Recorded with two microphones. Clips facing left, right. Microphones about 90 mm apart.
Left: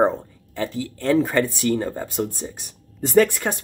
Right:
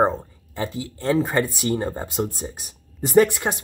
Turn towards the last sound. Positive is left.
turn(degrees=-20)  # may be behind; listen again after turning